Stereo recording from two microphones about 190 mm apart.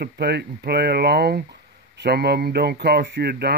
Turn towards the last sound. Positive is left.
turn(degrees=-55)  # may be behind; listen again after turning